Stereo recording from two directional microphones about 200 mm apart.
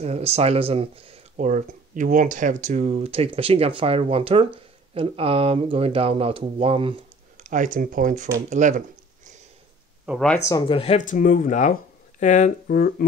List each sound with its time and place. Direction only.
0.0 s speech: 30° right (ahead or behind)
10.0 s speech: 5° left (ahead or behind)
10.8 s speech: 35° left (ahead or behind)